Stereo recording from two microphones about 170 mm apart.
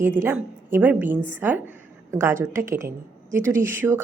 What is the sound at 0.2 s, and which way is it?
Speech, 10° right (ahead or behind).